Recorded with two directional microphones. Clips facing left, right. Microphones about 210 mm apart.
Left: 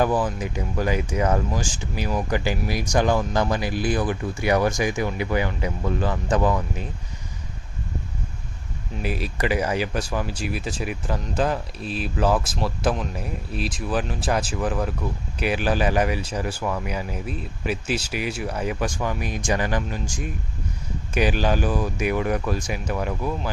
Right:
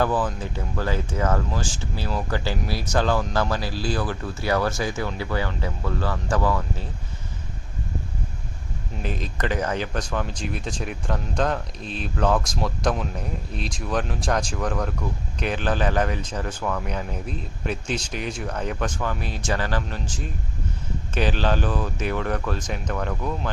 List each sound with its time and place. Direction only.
0.0 s speech: 10° left (ahead or behind)
9.0 s speech: 10° left (ahead or behind)